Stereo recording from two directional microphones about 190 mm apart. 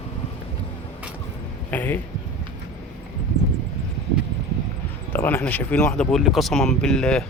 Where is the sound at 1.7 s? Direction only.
10° left (ahead or behind).